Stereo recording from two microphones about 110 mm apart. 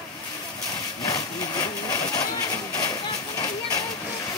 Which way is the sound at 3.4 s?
35° left (ahead or behind).